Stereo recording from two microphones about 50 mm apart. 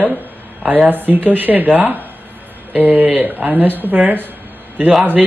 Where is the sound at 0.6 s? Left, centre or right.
Right.